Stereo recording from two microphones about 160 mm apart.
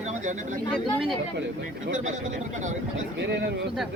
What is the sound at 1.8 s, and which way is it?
Speech, 50° right (ahead or behind).